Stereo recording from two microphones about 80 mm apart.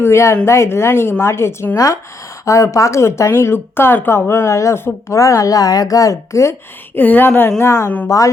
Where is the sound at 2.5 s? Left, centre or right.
Left.